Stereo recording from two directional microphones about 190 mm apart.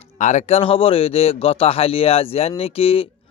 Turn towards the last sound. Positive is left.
turn(degrees=30)  # may be behind; listen again after turning